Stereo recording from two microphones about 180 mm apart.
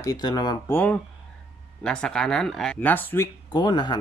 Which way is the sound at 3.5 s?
25° left (ahead or behind).